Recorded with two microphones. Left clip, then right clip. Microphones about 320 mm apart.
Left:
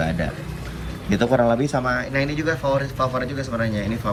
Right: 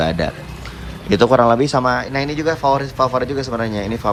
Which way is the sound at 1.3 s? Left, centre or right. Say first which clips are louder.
Right 4 dB; left.